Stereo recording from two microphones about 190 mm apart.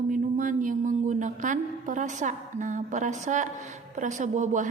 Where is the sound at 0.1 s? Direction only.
45° right (ahead or behind).